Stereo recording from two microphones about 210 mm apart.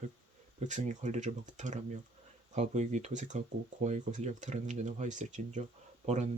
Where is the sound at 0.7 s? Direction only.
35° right (ahead or behind).